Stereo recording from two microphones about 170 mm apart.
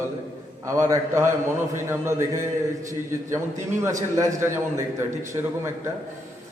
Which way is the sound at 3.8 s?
20° right (ahead or behind).